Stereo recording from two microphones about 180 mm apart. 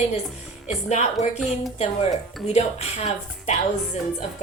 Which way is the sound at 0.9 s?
40° left (ahead or behind).